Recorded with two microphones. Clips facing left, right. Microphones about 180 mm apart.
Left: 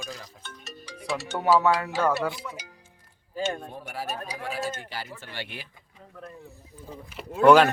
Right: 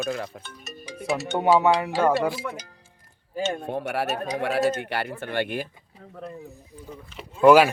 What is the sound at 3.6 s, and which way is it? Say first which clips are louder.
Speech: right 8 dB; 70° right (ahead or behind).